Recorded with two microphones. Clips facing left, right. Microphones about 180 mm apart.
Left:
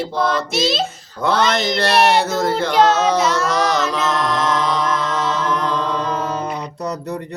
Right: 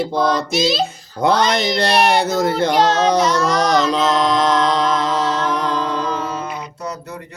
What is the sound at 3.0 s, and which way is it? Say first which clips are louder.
Speech: right 2 dB; 5° left (ahead or behind).